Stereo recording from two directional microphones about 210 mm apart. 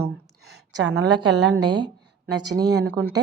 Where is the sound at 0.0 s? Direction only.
50° right (ahead or behind).